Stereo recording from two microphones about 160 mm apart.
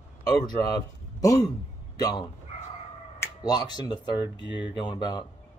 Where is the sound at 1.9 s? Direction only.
25° left (ahead or behind).